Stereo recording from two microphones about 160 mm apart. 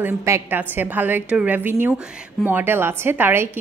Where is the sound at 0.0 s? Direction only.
15° right (ahead or behind).